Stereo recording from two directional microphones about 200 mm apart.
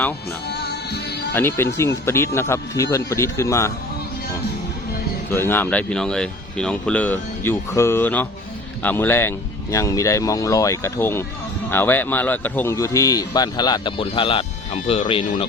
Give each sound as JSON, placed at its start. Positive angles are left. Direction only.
{"t": 0.4, "sound": "music", "side_deg": 55}
{"t": 1.3, "sound": "speech", "side_deg": 10}
{"t": 5.3, "sound": "speech", "side_deg": 10}